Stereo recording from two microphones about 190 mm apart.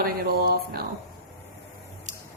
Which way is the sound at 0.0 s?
55° right (ahead or behind).